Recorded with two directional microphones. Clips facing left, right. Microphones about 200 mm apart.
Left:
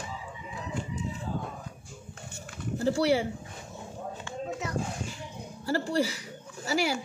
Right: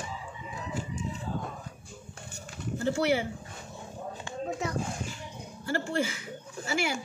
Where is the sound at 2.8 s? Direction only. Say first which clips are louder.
Left 2 dB; 35° left (ahead or behind).